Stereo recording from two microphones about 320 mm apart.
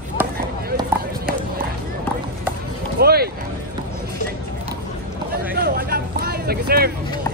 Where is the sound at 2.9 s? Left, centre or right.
Right.